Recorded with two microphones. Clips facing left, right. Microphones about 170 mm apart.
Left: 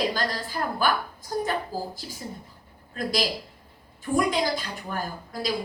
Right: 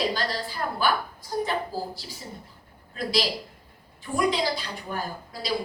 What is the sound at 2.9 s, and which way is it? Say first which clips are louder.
A woman's voice: even; 45° left (ahead or behind).